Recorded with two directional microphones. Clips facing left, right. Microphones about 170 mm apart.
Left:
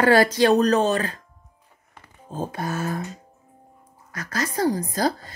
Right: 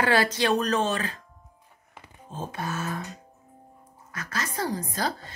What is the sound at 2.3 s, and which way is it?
Speech, 40° left (ahead or behind).